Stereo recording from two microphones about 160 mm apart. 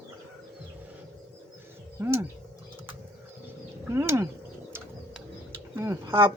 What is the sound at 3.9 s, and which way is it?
Speech, 15° right (ahead or behind).